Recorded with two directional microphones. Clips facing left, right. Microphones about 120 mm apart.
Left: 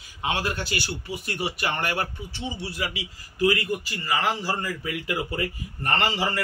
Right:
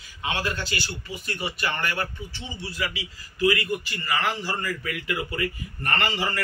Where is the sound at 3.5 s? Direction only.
25° left (ahead or behind).